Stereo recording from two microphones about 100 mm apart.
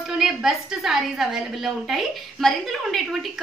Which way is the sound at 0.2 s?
5° right (ahead or behind).